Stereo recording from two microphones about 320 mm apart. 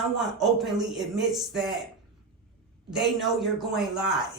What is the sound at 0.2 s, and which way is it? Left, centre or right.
Speech, centre.